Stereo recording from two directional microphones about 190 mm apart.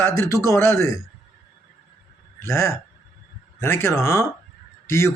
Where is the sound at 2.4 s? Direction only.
15° left (ahead or behind).